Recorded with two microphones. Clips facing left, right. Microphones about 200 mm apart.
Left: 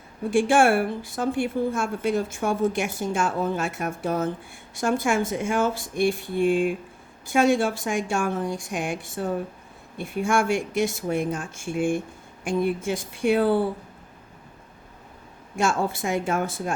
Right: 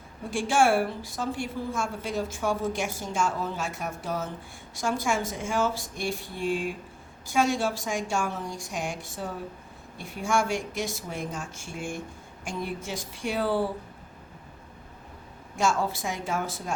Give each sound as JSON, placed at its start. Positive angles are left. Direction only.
{"t": 0.3, "sound": "a woman's voice", "side_deg": 55}
{"t": 10.0, "sound": "a woman's voice", "side_deg": 55}
{"t": 15.5, "sound": "speech", "side_deg": 55}